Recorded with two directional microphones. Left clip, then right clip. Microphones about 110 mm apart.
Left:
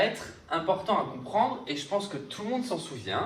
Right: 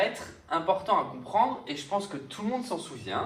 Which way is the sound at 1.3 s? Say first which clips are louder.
Right 1 dB; 50° right (ahead or behind).